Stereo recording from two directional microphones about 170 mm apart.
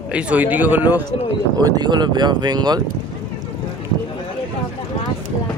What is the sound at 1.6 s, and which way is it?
Speech, 25° right (ahead or behind).